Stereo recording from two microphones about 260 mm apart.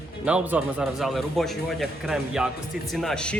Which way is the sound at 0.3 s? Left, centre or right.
Centre.